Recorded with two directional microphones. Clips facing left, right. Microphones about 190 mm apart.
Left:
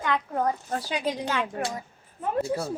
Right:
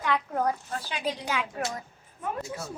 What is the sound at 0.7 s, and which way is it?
Speech, 40° left (ahead or behind).